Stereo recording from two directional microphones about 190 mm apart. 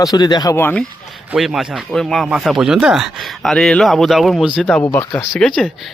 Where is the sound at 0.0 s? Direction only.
20° left (ahead or behind).